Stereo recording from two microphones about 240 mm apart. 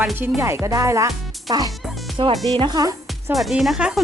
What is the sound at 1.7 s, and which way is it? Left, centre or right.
Music, centre.